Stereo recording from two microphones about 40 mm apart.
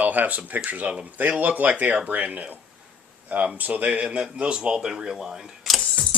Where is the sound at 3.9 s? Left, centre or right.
Right.